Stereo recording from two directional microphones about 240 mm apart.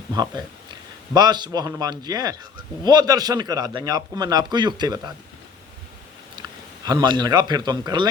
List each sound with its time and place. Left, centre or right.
0.1 s a man's voice: centre
6.8 s a man's voice: centre